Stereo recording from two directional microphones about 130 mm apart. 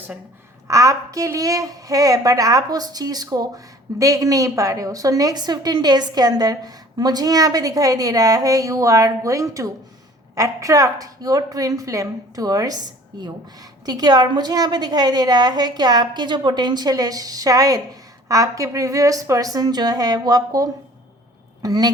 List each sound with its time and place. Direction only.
0.7 s a woman's voice: 25° right (ahead or behind)